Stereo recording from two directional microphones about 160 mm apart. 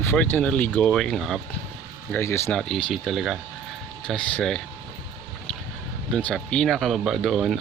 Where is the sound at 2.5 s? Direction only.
5° left (ahead or behind).